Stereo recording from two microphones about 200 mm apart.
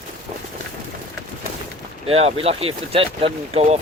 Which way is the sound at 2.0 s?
30° right (ahead or behind).